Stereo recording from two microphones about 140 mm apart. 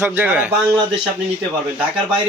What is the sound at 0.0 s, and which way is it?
Speech, 10° right (ahead or behind).